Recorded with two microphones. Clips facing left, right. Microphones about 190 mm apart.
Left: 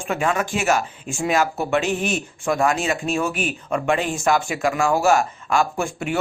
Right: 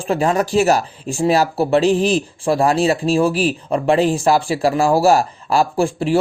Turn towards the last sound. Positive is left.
turn(degrees=-30)  # may be behind; listen again after turning